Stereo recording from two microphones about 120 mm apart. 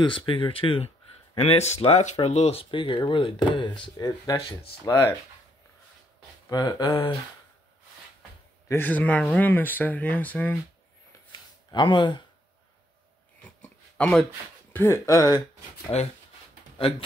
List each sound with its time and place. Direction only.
0.0 s speech: 45° left (ahead or behind); by 2.6 s 60° left (ahead or behind)
2.6 s speech: 45° left (ahead or behind)
3.9 s speech: 30° left (ahead or behind)
6.5 s speech: 35° left (ahead or behind)
8.6 s speech: 15° left (ahead or behind)
11.7 s speech: 40° left (ahead or behind)
13.4 s a sound: 10° left (ahead or behind)
14.7 s speech: 20° left (ahead or behind)